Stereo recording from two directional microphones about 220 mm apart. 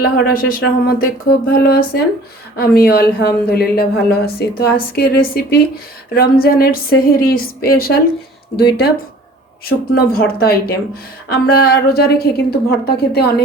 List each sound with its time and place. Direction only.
0.0 s a woman's voice: 40° left (ahead or behind)